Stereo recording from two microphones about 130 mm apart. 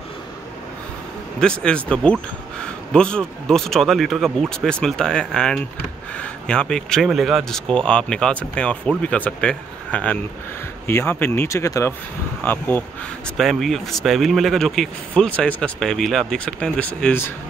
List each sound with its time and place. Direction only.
1.4 s speech: 5° left (ahead or behind)
13.4 s speech: centre (ahead or behind)